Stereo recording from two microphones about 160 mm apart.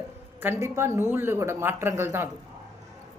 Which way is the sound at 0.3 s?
15° right (ahead or behind).